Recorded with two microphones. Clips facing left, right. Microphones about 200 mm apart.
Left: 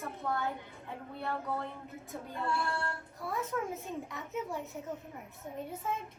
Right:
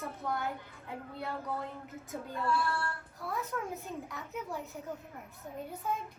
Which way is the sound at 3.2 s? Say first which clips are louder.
Left 2 dB; centre (ahead or behind).